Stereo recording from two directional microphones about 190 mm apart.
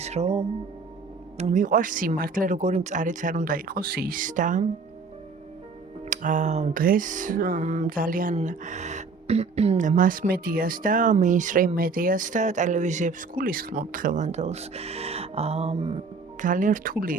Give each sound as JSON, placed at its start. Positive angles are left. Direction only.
{"t": 0.0, "sound": "speech", "side_deg": -35}
{"t": 6.1, "sound": "speech", "side_deg": -40}
{"t": 16.4, "sound": "speech", "side_deg": -45}